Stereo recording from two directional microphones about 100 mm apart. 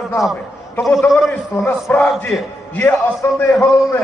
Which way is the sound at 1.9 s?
20° left (ahead or behind).